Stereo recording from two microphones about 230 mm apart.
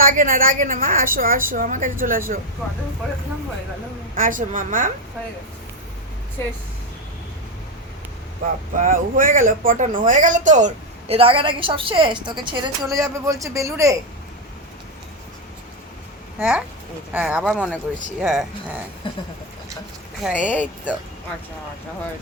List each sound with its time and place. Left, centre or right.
0.0 s a woman's voice: right
4.1 s a woman's voice: right
8.8 s a woman's voice: right; by 13.9 s centre
16.4 s speech: centre
19.1 s speech: left
20.2 s speech: centre